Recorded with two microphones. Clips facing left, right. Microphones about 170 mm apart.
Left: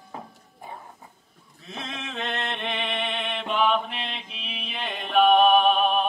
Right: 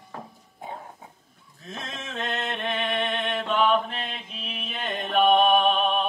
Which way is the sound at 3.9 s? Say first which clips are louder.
Even; 45° right (ahead or behind).